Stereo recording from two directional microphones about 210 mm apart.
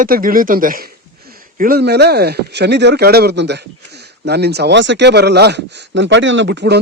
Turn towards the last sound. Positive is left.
turn(degrees=-50)  # may be behind; listen again after turning